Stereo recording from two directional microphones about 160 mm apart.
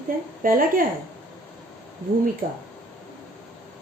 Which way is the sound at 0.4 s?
60° right (ahead or behind).